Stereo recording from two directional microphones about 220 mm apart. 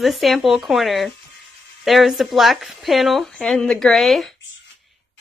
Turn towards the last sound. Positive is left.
turn(degrees=0)  # may be behind; listen again after turning